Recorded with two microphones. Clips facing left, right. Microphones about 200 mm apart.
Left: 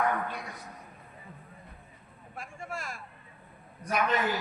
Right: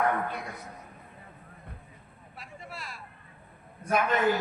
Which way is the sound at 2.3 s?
50° left (ahead or behind).